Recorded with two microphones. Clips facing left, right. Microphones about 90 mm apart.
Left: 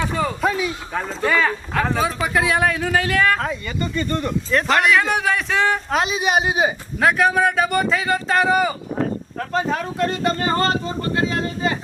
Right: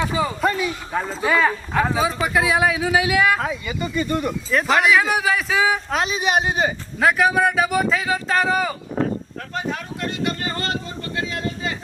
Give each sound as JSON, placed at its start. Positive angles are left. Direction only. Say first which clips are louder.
{"t": 0.0, "sound": "speech", "louder": "even", "side_deg": -5}
{"t": 9.5, "sound": "speech", "louder": "left 5 dB", "side_deg": 40}